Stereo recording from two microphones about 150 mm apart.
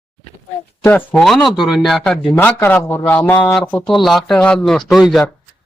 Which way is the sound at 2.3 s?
15° left (ahead or behind).